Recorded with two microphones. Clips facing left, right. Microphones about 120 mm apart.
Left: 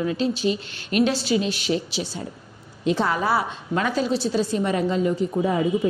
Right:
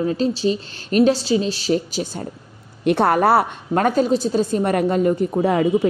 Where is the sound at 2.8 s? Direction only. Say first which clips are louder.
Right 6 dB; 60° right (ahead or behind).